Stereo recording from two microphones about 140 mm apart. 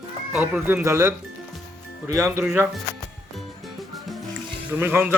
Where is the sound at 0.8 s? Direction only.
20° right (ahead or behind).